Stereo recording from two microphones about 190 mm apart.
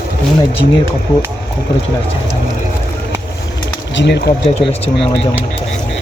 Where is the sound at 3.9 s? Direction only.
70° left (ahead or behind).